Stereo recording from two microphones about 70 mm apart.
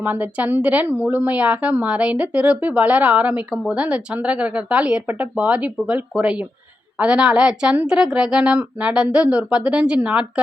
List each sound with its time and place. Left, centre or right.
0.0 s speech: right